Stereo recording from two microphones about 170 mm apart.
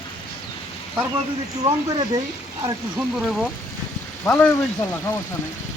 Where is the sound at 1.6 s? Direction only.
25° right (ahead or behind).